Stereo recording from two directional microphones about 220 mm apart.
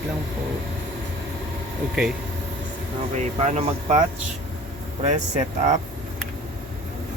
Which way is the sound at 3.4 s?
30° right (ahead or behind).